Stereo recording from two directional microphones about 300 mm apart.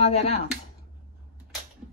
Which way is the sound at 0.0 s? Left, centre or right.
Left.